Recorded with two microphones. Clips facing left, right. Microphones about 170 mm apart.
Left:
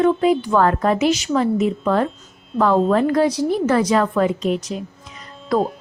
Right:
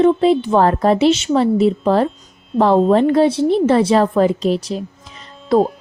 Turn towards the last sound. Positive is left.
turn(degrees=-25)  # may be behind; listen again after turning